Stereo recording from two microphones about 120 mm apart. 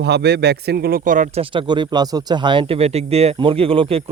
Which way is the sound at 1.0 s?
90° right.